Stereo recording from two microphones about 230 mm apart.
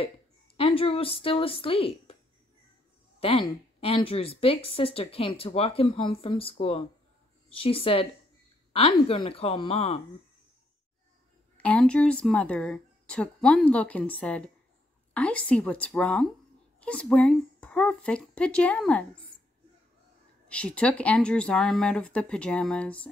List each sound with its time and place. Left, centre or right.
0.6 s a woman's voice: left
3.2 s a woman's voice: left
11.5 s speech: centre
20.4 s speech: centre